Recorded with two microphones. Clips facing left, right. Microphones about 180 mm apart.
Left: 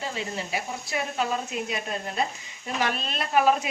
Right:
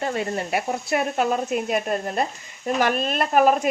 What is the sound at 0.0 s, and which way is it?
A woman's voice, 55° right (ahead or behind).